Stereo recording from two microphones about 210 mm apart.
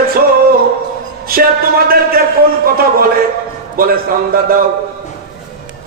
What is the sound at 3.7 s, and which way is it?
Speech, 45° right (ahead or behind).